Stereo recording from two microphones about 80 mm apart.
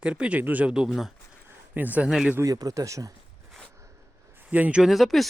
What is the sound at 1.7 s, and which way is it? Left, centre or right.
Speech, right.